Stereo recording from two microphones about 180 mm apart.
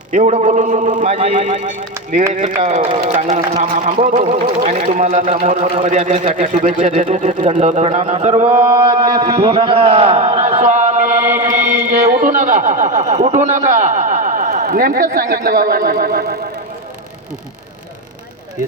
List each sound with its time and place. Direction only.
0.1 s speech: 45° right (ahead or behind)
8.4 s mantra: 15° right (ahead or behind)
9.2 s a man's voice: 30° right (ahead or behind); by 16.4 s 60° right (ahead or behind)